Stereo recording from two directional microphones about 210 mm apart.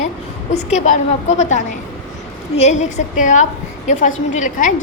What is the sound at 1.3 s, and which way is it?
Speech, 35° left (ahead or behind).